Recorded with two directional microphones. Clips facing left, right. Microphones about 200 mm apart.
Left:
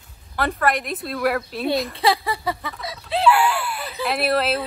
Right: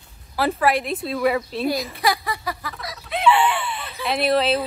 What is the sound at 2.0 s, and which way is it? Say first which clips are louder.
Speech: left 1 dB; 30° left (ahead or behind).